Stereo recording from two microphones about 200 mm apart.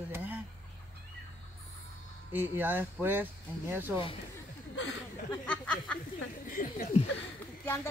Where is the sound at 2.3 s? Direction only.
10° right (ahead or behind).